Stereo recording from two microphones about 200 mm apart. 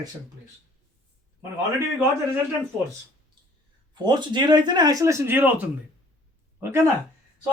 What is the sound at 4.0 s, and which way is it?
Speech, 20° right (ahead or behind).